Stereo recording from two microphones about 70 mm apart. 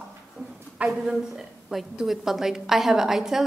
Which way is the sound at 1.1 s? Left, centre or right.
Centre.